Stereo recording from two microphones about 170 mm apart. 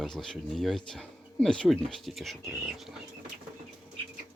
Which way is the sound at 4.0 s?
35° right (ahead or behind).